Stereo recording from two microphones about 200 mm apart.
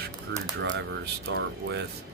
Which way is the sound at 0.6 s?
55° right (ahead or behind).